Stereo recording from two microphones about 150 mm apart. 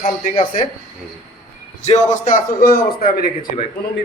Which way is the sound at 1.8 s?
50° left (ahead or behind).